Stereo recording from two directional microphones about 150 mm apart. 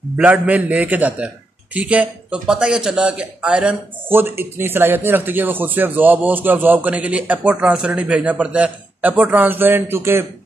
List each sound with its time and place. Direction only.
0.2 s a man's voice: 10° right (ahead or behind)